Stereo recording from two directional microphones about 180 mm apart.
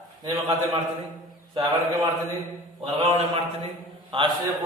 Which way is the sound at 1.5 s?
20° right (ahead or behind).